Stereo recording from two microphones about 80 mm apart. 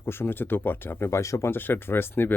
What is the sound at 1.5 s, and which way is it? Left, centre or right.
Speech, left.